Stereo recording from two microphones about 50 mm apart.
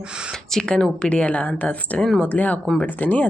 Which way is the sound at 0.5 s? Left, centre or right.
Centre.